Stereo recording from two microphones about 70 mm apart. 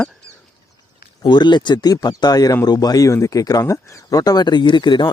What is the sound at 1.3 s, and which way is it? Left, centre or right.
Speech, left.